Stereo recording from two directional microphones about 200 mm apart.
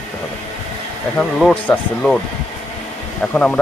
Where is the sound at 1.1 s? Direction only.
5° left (ahead or behind).